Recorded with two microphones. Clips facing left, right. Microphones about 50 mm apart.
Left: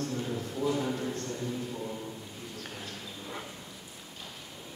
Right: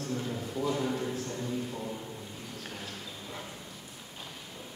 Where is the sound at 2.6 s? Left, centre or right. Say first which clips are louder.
Even; centre.